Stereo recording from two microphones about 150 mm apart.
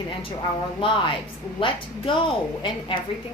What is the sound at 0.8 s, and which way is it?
A woman's voice, 35° left (ahead or behind).